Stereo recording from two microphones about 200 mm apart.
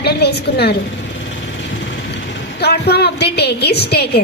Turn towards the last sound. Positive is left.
turn(degrees=55)  # may be behind; listen again after turning